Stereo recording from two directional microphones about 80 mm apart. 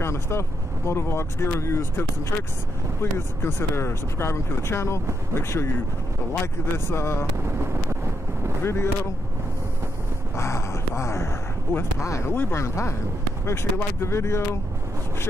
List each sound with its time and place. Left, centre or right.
0.0 s speech: left
8.6 s speech: left
10.3 s a sound: left
12.0 s speech: left